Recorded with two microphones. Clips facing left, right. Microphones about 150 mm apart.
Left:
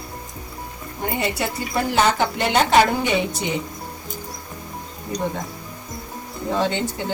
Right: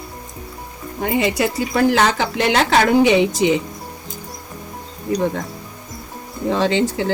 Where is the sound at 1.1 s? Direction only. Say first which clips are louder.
Right 7 dB; 90° right.